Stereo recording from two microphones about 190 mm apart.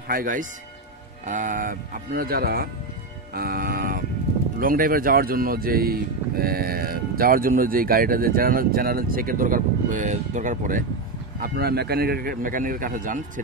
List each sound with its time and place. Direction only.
0.1 s speech: 45° right (ahead or behind)
11.4 s speech: 55° right (ahead or behind)